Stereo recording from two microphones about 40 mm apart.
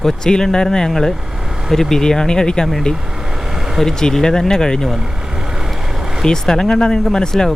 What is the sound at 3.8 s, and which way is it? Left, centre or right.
Speech, centre.